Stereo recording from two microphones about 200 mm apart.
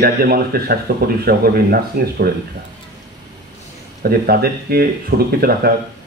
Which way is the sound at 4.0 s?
50° right (ahead or behind).